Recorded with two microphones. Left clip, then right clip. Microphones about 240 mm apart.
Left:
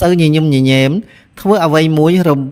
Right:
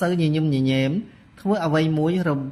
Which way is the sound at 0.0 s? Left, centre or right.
Left.